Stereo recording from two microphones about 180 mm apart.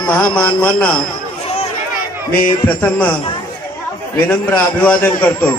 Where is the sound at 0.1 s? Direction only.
10° left (ahead or behind).